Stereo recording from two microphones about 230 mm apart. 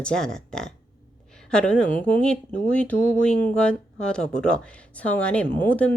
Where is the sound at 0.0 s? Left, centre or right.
Centre.